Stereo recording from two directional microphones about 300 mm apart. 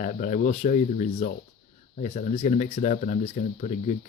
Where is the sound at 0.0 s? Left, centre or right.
Left.